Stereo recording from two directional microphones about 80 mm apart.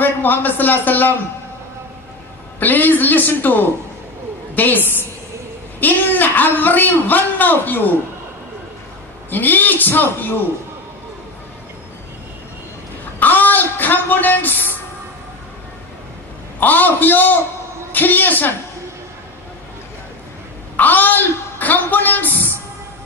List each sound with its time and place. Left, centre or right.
0.0 s a man's voice: left
2.6 s a man's voice: left
9.3 s a man's voice: left
13.2 s a sound: left
16.5 s a man's voice: left
20.7 s a man's voice: left